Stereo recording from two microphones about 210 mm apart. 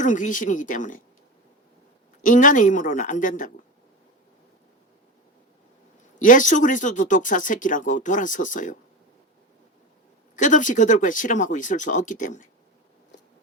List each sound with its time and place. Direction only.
0.0 s speech: 35° left (ahead or behind)
2.2 s speech: 40° left (ahead or behind)
6.1 s speech: 40° left (ahead or behind)
10.3 s speech: 35° left (ahead or behind)